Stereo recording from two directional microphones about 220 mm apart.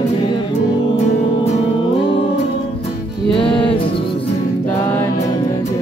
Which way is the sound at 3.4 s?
25° left (ahead or behind).